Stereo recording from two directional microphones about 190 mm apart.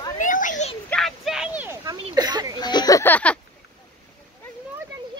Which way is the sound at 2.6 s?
20° left (ahead or behind).